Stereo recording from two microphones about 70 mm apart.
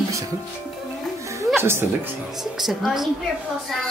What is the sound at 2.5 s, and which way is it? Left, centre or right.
Music, centre.